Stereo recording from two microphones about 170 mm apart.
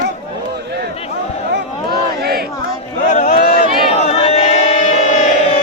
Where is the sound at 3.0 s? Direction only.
45° left (ahead or behind).